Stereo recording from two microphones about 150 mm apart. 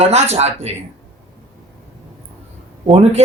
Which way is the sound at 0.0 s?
45° right (ahead or behind).